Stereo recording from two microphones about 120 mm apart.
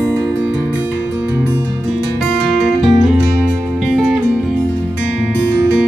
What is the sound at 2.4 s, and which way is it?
Music, centre (ahead or behind).